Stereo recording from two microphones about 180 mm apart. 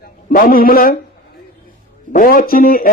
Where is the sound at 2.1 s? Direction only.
50° left (ahead or behind).